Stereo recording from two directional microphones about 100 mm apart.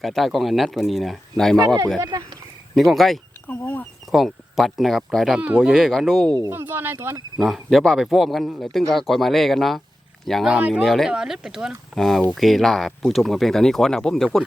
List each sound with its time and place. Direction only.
0.0 s speech: centre (ahead or behind)
1.5 s speech: 40° right (ahead or behind)
2.7 s speech: centre (ahead or behind)
3.4 s speech: 20° left (ahead or behind)
4.1 s speech: centre (ahead or behind)
5.4 s speech: 10° right (ahead or behind)
6.5 s speech: 20° right (ahead or behind)
7.3 s speech: centre (ahead or behind)
10.5 s speech: 10° right (ahead or behind)
10.8 s speech: centre (ahead or behind)